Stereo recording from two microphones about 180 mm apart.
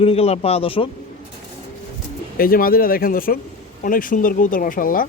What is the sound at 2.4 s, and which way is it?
Speech, 55° left (ahead or behind).